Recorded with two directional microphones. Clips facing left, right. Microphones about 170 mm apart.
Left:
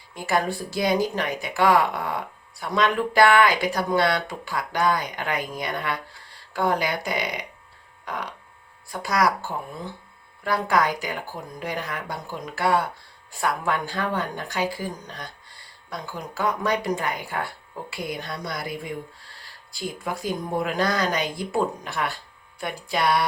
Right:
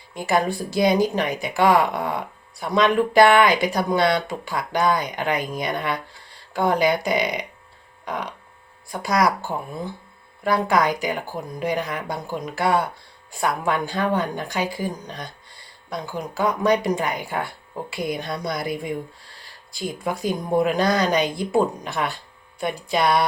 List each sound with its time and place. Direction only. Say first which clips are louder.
0.1 s a woman's voice: right 3 dB; 20° right (ahead or behind)
20.2 s speech: right 6 dB; 20° right (ahead or behind)